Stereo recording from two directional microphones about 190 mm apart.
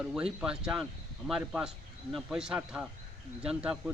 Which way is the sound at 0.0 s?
5° right (ahead or behind).